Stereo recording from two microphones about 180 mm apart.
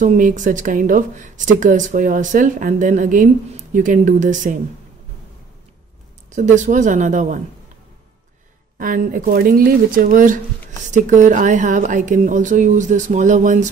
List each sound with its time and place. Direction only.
0.0 s speech: 45° right (ahead or behind)
6.3 s speech: 45° right (ahead or behind)
8.7 s speech: 50° right (ahead or behind)